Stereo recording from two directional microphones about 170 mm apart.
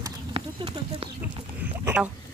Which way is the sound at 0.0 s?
30° right (ahead or behind).